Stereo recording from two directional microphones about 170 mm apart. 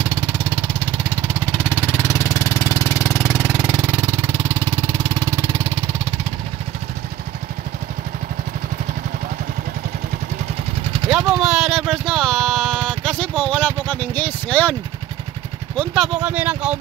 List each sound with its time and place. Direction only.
1.9 s vehicle: 15° left (ahead or behind)
3.4 s vehicle: 10° right (ahead or behind)
11.1 s a sound: 5° right (ahead or behind)
15.7 s speech: 5° left (ahead or behind)